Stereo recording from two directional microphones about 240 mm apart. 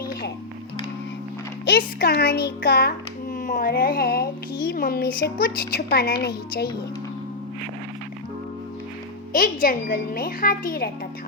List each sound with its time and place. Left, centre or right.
1.6 s a woman's voice: left
9.3 s a woman's voice: left